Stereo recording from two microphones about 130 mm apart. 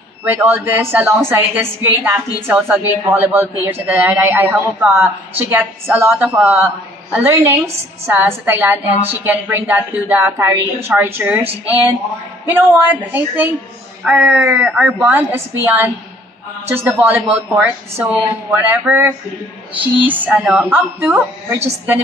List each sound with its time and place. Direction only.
0.2 s a woman's voice: 15° right (ahead or behind)
12.8 s a woman's voice: 15° right (ahead or behind)
20.3 s speech: centre (ahead or behind)
20.6 s a woman's voice: 15° right (ahead or behind)